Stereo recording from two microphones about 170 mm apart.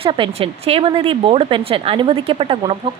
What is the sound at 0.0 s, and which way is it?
A woman's voice, 30° right (ahead or behind).